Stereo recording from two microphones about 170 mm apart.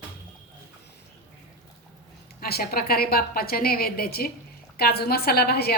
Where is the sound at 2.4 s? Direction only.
60° left (ahead or behind).